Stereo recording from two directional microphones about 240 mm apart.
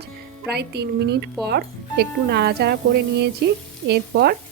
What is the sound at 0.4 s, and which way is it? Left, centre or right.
Speech, right.